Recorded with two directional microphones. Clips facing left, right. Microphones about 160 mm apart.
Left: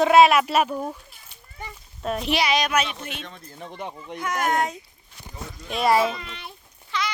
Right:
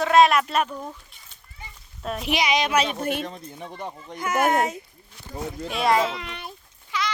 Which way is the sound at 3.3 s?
30° right (ahead or behind).